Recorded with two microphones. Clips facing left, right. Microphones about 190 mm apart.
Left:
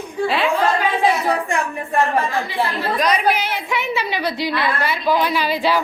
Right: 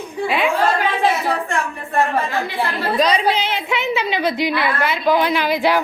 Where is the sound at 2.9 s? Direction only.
30° right (ahead or behind).